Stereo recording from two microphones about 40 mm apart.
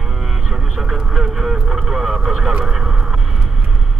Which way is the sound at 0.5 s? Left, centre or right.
Right.